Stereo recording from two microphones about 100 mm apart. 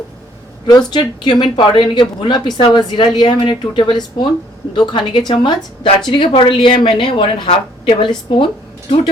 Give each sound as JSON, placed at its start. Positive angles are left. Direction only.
{"t": 0.7, "sound": "a woman's voice", "side_deg": 45}